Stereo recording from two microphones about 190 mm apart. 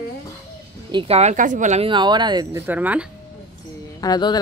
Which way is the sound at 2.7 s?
10° right (ahead or behind).